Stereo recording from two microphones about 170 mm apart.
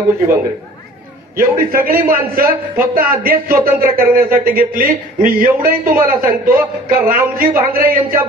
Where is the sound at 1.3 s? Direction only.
60° right (ahead or behind).